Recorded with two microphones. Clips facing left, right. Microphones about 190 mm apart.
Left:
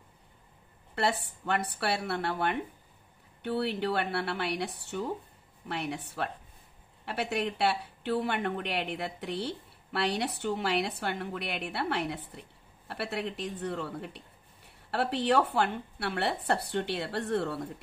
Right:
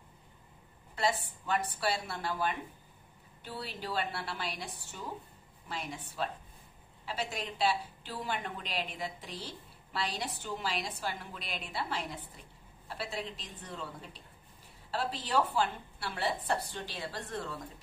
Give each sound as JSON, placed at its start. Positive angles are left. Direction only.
{"t": 0.9, "sound": "a woman's voice", "side_deg": 65}